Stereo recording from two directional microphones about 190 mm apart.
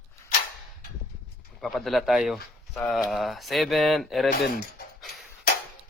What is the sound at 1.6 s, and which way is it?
Speech, centre (ahead or behind).